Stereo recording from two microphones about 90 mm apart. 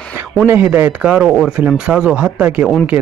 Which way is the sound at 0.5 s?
20° right (ahead or behind).